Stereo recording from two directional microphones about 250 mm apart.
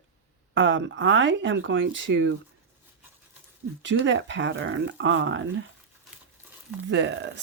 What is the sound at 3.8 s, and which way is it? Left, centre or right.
Speech, right.